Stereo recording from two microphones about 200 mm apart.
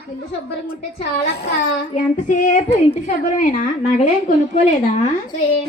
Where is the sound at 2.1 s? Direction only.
40° left (ahead or behind).